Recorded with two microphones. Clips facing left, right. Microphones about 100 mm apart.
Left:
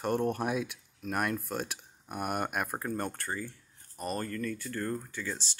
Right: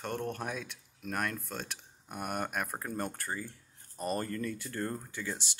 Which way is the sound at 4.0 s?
20° right (ahead or behind).